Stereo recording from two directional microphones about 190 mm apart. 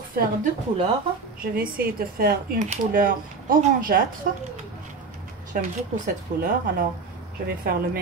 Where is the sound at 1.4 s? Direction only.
50° right (ahead or behind).